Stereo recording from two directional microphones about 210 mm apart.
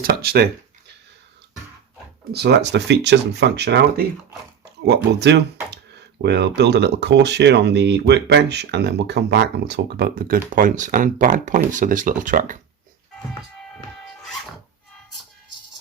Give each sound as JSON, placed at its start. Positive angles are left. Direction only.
{"t": 0.0, "sound": "speech", "side_deg": -45}
{"t": 2.3, "sound": "speech", "side_deg": -50}